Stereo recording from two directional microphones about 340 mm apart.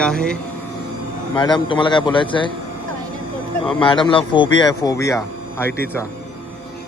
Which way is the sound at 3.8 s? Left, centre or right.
Centre.